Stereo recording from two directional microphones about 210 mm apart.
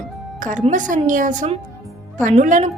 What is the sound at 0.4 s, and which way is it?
A woman's voice, 35° right (ahead or behind).